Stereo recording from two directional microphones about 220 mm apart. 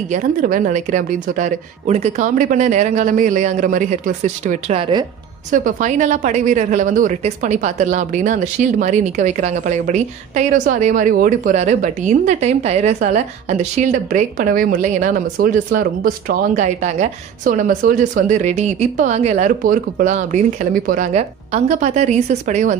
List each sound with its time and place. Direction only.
0.1 s a woman's voice: 35° right (ahead or behind)